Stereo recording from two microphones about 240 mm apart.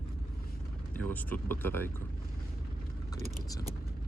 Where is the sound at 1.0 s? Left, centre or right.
Centre.